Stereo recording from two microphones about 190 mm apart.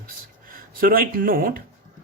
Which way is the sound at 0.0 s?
50° right (ahead or behind).